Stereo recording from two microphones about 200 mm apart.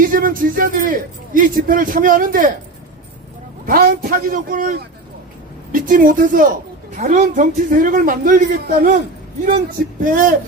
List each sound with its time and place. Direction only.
0.0 s a man's voice: 45° right (ahead or behind)
3.7 s a man's voice: 45° right (ahead or behind)
10.0 s a man's voice: 45° right (ahead or behind)